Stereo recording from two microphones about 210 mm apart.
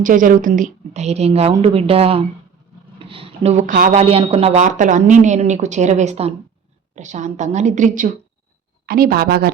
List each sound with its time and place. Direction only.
0.0 s a woman's voice: 40° right (ahead or behind)